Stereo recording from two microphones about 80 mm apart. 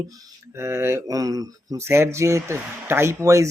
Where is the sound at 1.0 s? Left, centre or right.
Right.